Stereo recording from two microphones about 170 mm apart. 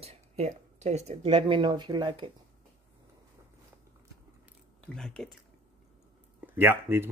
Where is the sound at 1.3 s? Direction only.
30° right (ahead or behind).